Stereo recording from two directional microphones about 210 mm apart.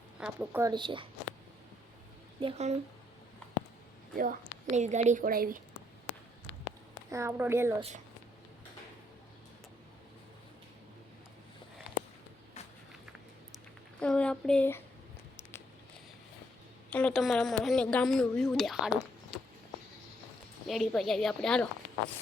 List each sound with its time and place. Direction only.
0.2 s speech: 5° right (ahead or behind)
0.7 s speech: 25° right (ahead or behind)
2.4 s speech: 30° right (ahead or behind)
3.4 s a sound: 5° left (ahead or behind)
4.1 s a woman's voice: 40° right (ahead or behind)
7.1 s speech: 10° right (ahead or behind)
7.8 s a woman's voice: 30° right (ahead or behind)
12.6 s a sound: 30° left (ahead or behind)
14.0 s a sound: 5° left (ahead or behind)
16.9 s a woman's voice: 5° left (ahead or behind)
19.3 s a sound: 5° right (ahead or behind)
20.7 s a woman's voice: centre (ahead or behind)